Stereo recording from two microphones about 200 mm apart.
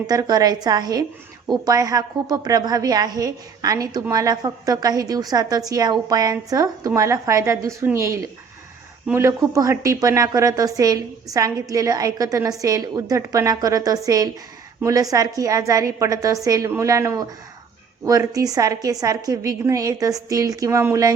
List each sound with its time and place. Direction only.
0.1 s a woman's voice: 20° right (ahead or behind)